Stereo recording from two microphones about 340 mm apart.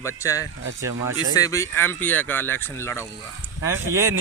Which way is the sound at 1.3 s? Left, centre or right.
Centre.